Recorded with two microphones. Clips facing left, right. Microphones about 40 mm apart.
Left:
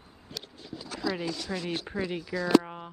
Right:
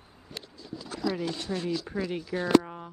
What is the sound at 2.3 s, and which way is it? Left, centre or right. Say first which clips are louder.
Speech: right 1 dB; left.